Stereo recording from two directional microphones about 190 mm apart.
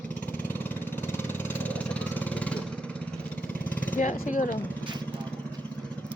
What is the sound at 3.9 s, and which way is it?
Speech, 40° left (ahead or behind).